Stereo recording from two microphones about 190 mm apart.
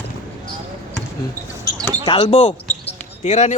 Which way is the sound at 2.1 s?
25° left (ahead or behind).